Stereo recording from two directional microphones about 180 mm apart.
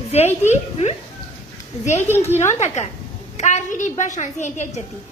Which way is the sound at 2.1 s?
35° left (ahead or behind).